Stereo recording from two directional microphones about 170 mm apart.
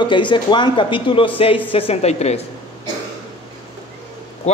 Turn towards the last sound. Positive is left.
turn(degrees=40)  # may be behind; listen again after turning